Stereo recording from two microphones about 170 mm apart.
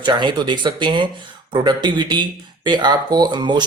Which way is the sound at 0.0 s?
25° right (ahead or behind).